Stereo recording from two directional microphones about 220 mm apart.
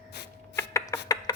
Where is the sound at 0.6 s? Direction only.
15° left (ahead or behind).